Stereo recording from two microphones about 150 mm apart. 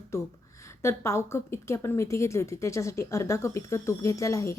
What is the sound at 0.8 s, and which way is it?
A woman's voice, 20° left (ahead or behind).